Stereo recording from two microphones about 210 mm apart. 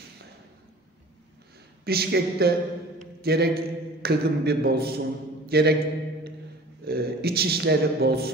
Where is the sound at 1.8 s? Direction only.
50° right (ahead or behind).